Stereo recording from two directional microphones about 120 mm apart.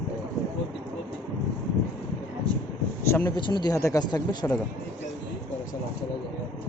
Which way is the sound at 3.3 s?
40° left (ahead or behind).